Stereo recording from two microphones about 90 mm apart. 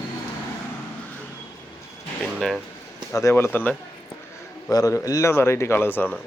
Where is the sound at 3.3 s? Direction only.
20° left (ahead or behind).